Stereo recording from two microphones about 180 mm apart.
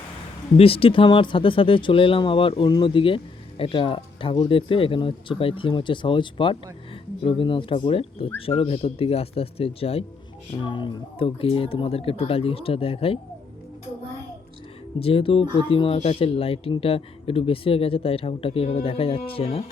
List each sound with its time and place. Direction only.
0.5 s speech: 30° left (ahead or behind)
14.9 s speech: 30° left (ahead or behind)